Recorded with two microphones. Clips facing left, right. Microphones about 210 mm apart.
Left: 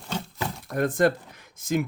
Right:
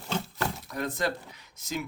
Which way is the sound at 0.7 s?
50° left (ahead or behind).